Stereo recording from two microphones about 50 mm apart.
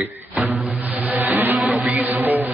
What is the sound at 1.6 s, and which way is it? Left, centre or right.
Music, centre.